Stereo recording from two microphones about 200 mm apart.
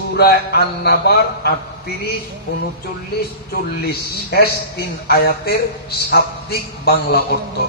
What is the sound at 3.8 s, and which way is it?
A man's voice, 50° left (ahead or behind).